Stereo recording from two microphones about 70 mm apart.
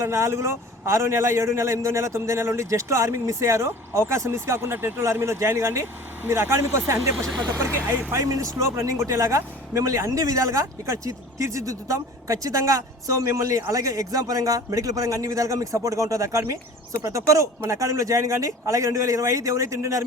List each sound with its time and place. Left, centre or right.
0.0 s a man's voice: right